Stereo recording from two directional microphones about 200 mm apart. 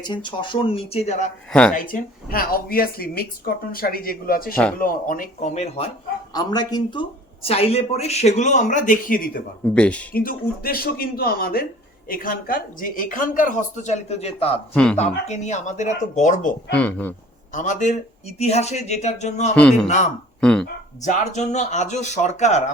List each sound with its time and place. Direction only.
0.0 s speech: 25° left (ahead or behind)
6.3 s speech: 20° left (ahead or behind); by 9.4 s 45° left (ahead or behind)
9.7 s speech: 5° left (ahead or behind)
10.2 s speech: 45° left (ahead or behind); by 14.6 s 30° left (ahead or behind)
14.7 s a man's voice: 5° left (ahead or behind)
15.3 s speech: 35° left (ahead or behind)
16.7 s speech: 10° left (ahead or behind)
17.5 s speech: 40° left (ahead or behind)
19.5 s a man's voice: 5° left (ahead or behind)
21.0 s speech: 35° left (ahead or behind)